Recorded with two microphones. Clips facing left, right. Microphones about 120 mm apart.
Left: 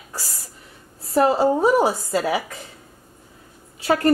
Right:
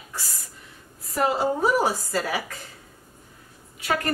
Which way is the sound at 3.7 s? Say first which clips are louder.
Left 8 dB; 30° left (ahead or behind).